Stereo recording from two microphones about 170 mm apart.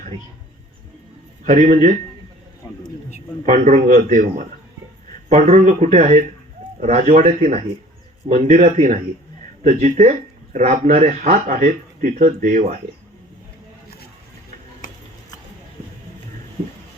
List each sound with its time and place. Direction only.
1.5 s speech: 45° right (ahead or behind)
3.4 s speech: 45° right (ahead or behind)
14.8 s a sound: 50° left (ahead or behind)